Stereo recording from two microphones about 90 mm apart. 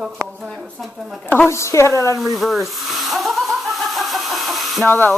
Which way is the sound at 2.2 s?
Centre (ahead or behind).